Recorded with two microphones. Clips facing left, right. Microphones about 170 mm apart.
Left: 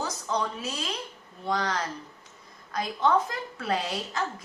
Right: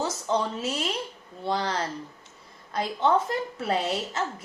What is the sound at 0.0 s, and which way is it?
A woman's voice, 25° right (ahead or behind).